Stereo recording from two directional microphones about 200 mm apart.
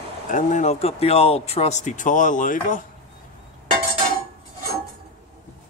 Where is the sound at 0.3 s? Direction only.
35° left (ahead or behind).